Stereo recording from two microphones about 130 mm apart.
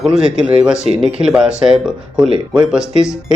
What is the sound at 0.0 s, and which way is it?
A man's voice, 5° right (ahead or behind).